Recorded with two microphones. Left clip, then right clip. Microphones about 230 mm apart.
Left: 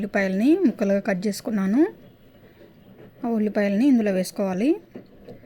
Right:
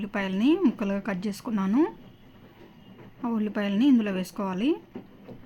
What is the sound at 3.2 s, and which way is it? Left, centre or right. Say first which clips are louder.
A woman's voice: left 6 dB; centre.